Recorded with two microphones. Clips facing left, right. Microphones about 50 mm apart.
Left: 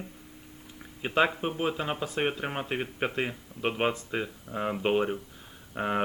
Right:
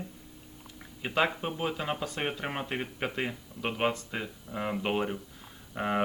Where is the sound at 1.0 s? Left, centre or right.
Centre.